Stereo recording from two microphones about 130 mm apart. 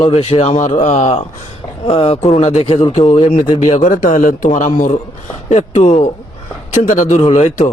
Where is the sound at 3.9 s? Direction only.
85° left.